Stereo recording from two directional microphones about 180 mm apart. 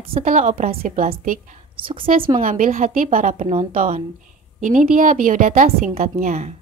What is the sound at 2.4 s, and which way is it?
A woman's voice, 45° right (ahead or behind).